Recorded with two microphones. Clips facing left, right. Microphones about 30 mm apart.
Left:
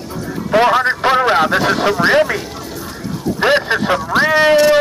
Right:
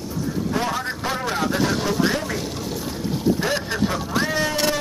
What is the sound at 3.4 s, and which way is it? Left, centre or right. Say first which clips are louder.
Speech: left 9 dB; left.